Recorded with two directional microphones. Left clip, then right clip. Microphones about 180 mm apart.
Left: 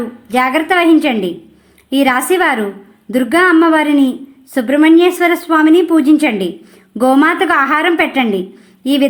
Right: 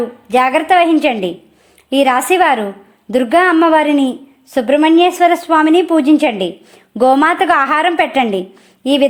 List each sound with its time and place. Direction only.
0.3 s a woman's voice: 30° right (ahead or behind)